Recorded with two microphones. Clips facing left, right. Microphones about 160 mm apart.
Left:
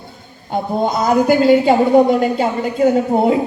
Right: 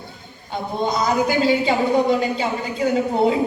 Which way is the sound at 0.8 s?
50° left (ahead or behind).